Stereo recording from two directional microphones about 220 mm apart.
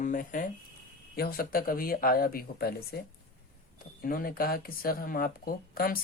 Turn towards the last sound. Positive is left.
turn(degrees=40)  # may be behind; listen again after turning